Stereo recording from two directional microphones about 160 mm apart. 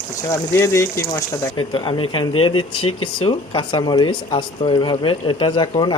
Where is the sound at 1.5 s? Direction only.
30° left (ahead or behind).